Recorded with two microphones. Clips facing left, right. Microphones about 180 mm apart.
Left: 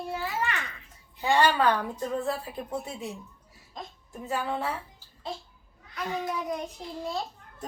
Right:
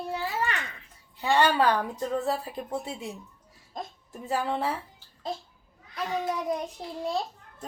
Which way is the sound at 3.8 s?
45° right (ahead or behind).